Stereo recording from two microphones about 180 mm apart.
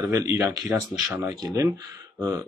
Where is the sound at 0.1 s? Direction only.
15° right (ahead or behind).